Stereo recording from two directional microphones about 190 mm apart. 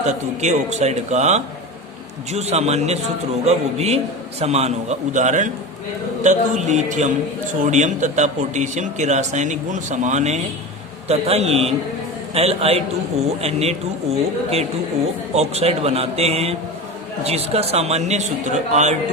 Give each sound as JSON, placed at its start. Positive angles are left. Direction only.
{"t": 0.1, "sound": "a man's voice", "side_deg": -35}